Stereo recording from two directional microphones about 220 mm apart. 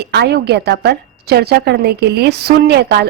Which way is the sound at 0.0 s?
50° right (ahead or behind).